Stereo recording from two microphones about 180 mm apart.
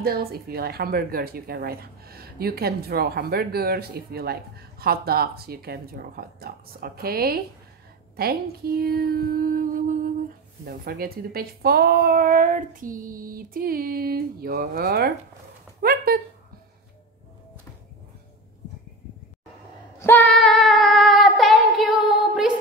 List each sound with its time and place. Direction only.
0.0 s speech: 60° right (ahead or behind)
15.8 s a sound: 55° right (ahead or behind)
20.0 s female singing: 10° left (ahead or behind)